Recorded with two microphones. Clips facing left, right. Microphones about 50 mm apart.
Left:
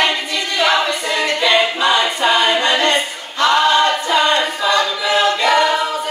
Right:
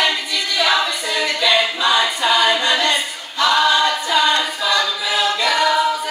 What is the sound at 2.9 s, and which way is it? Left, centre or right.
A capella, left.